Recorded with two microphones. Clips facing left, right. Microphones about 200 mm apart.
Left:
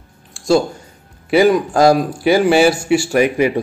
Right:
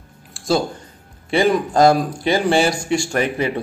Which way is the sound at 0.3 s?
Centre (ahead or behind).